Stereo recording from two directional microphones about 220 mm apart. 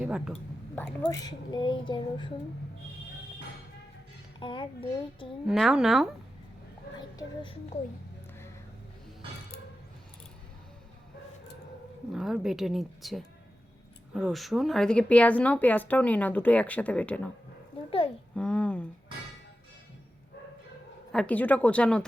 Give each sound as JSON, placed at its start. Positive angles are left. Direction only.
{"t": 0.0, "sound": "speech", "side_deg": -5}
{"t": 1.0, "sound": "speech", "side_deg": 20}
{"t": 4.4, "sound": "speech", "side_deg": 20}
{"t": 5.5, "sound": "speech", "side_deg": 0}
{"t": 7.2, "sound": "speech", "side_deg": 25}
{"t": 12.1, "sound": "speech", "side_deg": 0}
{"t": 18.3, "sound": "speech", "side_deg": 5}
{"t": 21.1, "sound": "speech", "side_deg": 5}